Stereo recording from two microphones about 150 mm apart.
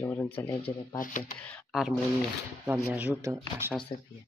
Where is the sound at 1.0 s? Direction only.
60° left (ahead or behind).